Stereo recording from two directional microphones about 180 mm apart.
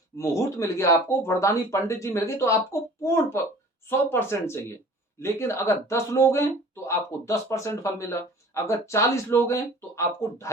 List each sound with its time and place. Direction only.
0.2 s speech: 15° left (ahead or behind)